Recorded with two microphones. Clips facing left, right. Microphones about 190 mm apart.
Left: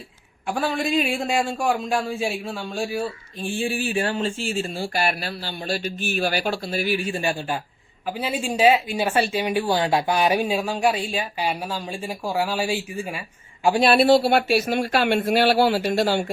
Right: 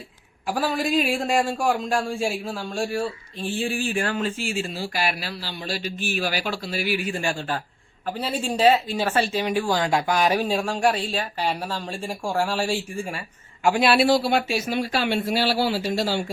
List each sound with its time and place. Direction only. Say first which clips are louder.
0.4 s a man's voice: even; centre (ahead or behind); by 4.3 s 25° left (ahead or behind)
4.4 s speech: left 2 dB; 35° left (ahead or behind)
4.9 s speech: left 3 dB; 55° left (ahead or behind)
7.1 s speech: left 1 dB; 20° left (ahead or behind)
10.4 s speech: even; 5° left (ahead or behind)
14.1 s speech: left 4 dB; 60° left (ahead or behind)